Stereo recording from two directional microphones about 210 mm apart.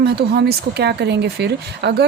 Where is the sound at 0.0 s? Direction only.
50° right (ahead or behind).